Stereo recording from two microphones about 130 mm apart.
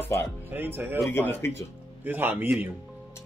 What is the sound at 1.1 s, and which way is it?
Speech, 15° left (ahead or behind).